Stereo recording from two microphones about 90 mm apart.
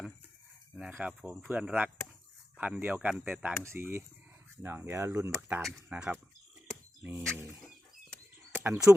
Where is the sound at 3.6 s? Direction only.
25° right (ahead or behind).